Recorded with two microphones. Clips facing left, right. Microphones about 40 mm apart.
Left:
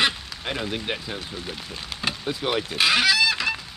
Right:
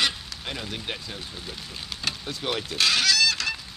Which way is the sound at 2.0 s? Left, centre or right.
Centre.